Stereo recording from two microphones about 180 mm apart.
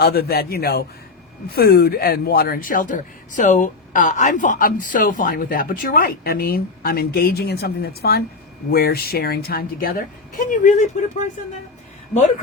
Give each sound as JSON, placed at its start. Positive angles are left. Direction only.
{"t": 0.0, "sound": "a woman's voice", "side_deg": 60}